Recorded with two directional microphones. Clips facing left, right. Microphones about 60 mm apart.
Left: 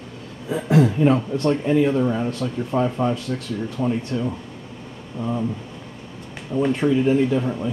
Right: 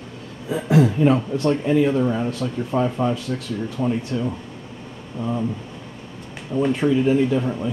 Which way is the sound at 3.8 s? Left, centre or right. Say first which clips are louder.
Even; centre.